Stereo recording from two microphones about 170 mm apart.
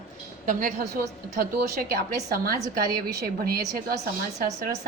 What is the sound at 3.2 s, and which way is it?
Speech, 65° right (ahead or behind).